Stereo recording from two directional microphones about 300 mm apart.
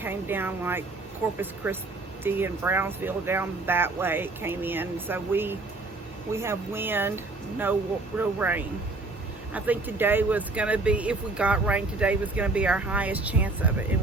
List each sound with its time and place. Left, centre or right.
0.0 s speech: centre
8.2 s speech: centre